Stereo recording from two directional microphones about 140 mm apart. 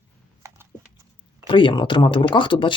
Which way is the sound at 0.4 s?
20° right (ahead or behind).